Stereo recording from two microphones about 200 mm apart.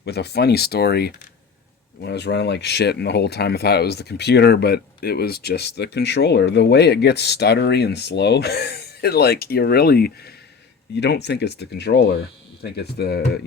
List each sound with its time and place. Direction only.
0.0 s speech: 55° left (ahead or behind)